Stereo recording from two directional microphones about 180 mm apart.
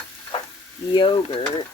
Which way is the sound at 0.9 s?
25° left (ahead or behind).